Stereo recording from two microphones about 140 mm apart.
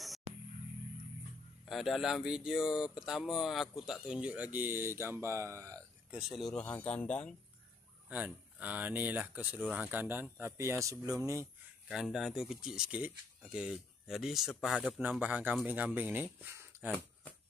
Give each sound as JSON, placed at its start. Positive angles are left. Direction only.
{"t": 0.3, "sound": "music", "side_deg": -50}
{"t": 1.7, "sound": "speech", "side_deg": 0}
{"t": 6.1, "sound": "speech", "side_deg": 0}
{"t": 8.1, "sound": "speech", "side_deg": -10}
{"t": 11.9, "sound": "speech", "side_deg": -5}
{"t": 15.0, "sound": "speech", "side_deg": -10}